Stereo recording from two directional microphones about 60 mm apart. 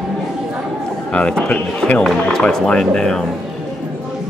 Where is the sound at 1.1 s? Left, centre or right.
Centre.